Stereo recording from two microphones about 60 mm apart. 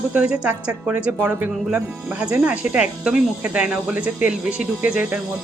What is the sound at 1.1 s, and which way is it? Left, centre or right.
Speech, right.